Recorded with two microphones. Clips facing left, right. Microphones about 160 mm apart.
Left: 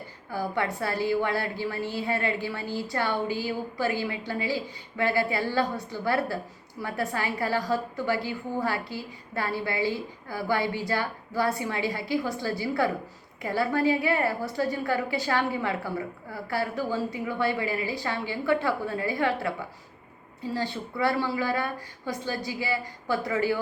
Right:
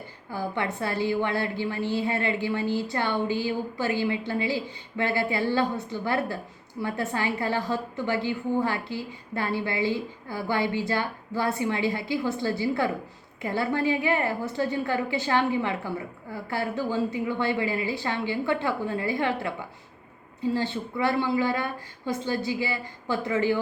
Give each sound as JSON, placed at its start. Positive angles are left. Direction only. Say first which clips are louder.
{"t": 0.3, "sound": "a woman's voice", "louder": "left 1 dB", "side_deg": -20}
{"t": 20.7, "sound": "a woman's voice", "louder": "right 1 dB", "side_deg": -20}